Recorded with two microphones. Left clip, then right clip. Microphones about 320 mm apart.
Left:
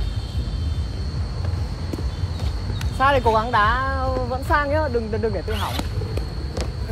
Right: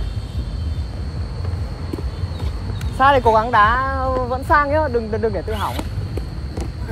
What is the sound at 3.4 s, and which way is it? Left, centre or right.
A woman's voice, centre.